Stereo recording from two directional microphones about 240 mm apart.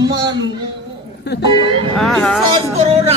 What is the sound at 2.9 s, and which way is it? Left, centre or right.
Speech, right.